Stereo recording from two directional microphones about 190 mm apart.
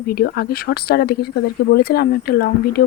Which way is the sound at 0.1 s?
55° left (ahead or behind).